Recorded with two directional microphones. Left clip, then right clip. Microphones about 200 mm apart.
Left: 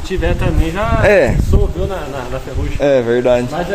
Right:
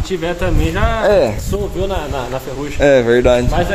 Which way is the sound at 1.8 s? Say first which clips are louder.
Right 2 dB; 55° right (ahead or behind).